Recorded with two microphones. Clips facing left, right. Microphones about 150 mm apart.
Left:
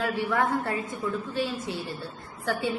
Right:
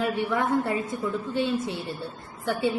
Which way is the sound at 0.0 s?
15° right (ahead or behind).